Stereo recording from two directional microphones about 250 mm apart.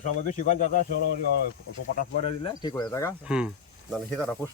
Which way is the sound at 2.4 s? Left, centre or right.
Centre.